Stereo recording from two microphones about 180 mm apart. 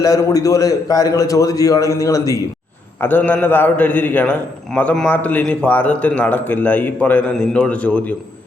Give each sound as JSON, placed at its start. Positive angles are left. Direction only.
{"t": 0.0, "sound": "a man's voice", "side_deg": 20}